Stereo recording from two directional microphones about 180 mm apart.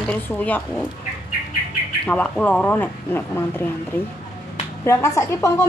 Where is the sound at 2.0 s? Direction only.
5° left (ahead or behind).